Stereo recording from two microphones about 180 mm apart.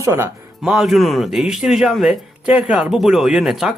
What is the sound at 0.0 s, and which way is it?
Speech, 15° right (ahead or behind).